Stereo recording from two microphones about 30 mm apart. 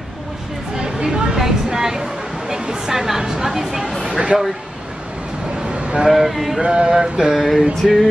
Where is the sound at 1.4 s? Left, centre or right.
Centre.